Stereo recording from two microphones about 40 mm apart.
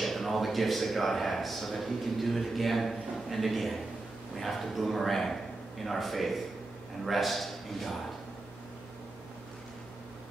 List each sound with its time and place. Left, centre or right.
0.0 s a man's voice: centre